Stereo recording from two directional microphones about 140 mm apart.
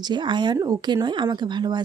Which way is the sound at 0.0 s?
35° right (ahead or behind).